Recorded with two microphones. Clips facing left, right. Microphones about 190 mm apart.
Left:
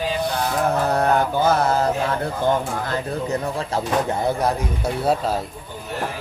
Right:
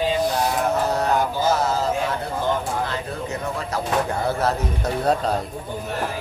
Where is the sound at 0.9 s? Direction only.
60° left (ahead or behind).